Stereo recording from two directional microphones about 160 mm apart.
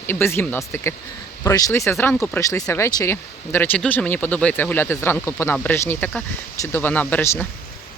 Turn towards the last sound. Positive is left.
turn(degrees=15)  # may be behind; listen again after turning